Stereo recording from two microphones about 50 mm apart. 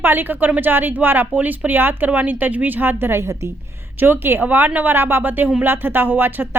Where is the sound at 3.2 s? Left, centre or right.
Right.